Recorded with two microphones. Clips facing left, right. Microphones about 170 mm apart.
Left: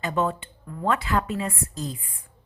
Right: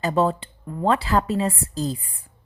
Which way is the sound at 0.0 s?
35° right (ahead or behind).